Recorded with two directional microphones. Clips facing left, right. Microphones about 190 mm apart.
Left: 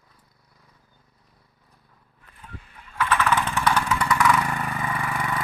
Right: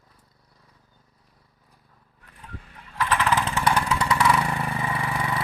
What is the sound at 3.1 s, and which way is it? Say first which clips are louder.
Vehicle: left 1 dB; 30° right (ahead or behind).